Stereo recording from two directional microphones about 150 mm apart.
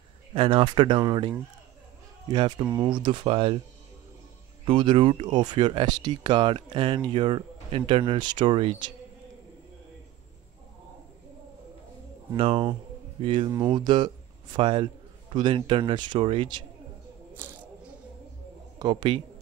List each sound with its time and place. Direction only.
0.3 s speech: 40° right (ahead or behind)
4.6 s speech: 35° right (ahead or behind)
12.4 s a man's voice: 35° right (ahead or behind)
18.8 s speech: 30° right (ahead or behind)